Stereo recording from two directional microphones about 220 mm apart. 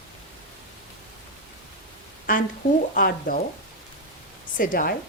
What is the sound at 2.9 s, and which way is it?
Speech, 40° left (ahead or behind).